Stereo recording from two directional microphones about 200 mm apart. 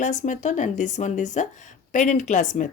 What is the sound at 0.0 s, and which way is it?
A woman's voice, 40° left (ahead or behind).